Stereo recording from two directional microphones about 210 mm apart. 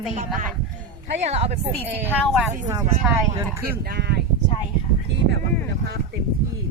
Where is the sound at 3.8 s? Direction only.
50° right (ahead or behind).